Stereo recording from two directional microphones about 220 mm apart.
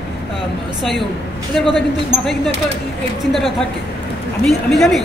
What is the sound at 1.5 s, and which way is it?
Speech, centre (ahead or behind).